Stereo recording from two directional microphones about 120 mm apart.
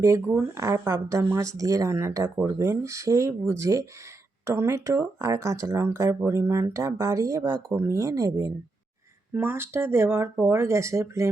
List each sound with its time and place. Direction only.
0.0 s speech: 25° right (ahead or behind)
9.3 s speech: 20° right (ahead or behind)